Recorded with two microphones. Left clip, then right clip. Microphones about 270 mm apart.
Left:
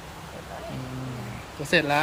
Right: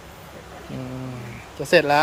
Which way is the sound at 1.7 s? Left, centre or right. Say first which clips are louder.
Right 6 dB; centre.